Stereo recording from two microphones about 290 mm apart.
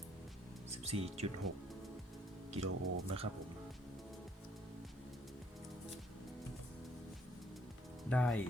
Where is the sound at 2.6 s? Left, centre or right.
Right.